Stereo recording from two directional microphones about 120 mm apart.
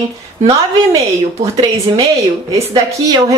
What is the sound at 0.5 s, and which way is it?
Speech, 30° right (ahead or behind).